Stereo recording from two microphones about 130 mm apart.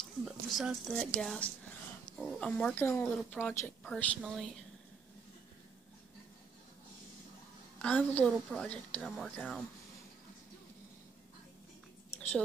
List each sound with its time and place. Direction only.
0.2 s speech: 5° right (ahead or behind)
2.8 s a woman's voice: 20° left (ahead or behind)
3.1 s speech: 10° left (ahead or behind)
7.8 s speech: 10° left (ahead or behind)